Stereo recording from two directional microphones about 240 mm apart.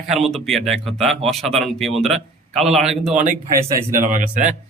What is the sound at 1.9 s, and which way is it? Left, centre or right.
Speech, right.